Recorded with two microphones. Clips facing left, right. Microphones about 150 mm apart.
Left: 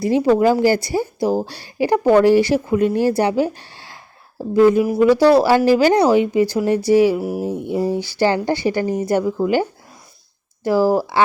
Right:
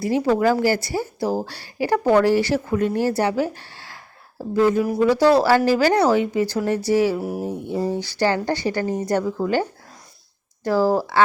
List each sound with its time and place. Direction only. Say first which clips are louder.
0.0 s a woman's voice: left 4 dB; 15° left (ahead or behind)